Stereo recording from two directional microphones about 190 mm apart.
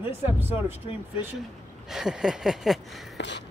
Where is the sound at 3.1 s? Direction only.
65° left (ahead or behind).